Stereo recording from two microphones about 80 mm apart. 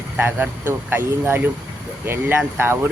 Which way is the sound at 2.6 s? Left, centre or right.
Right.